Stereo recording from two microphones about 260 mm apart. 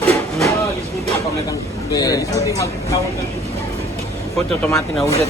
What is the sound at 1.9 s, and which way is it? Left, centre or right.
Speech, centre.